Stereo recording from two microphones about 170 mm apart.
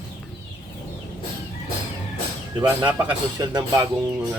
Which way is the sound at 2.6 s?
10° right (ahead or behind).